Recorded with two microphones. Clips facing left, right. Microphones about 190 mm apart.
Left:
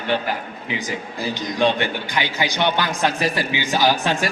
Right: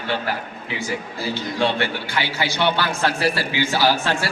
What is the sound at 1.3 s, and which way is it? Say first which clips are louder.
A man's voice: left 2 dB; 15° left (ahead or behind).